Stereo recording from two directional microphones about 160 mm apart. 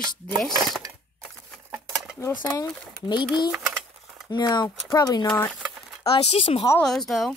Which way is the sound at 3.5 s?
5° right (ahead or behind).